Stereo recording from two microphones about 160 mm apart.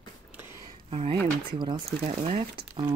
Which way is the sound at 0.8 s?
35° right (ahead or behind).